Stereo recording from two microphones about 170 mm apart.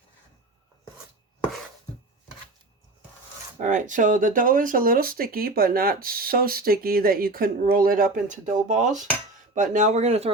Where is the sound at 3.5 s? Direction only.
50° right (ahead or behind).